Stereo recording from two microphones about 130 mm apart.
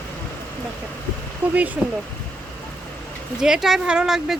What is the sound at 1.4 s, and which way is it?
Speech, 15° right (ahead or behind).